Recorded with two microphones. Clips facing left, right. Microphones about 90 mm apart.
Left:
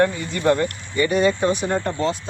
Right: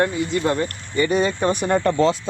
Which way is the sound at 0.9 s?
40° right (ahead or behind).